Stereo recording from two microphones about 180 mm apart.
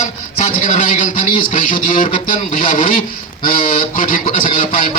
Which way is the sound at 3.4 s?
45° left (ahead or behind).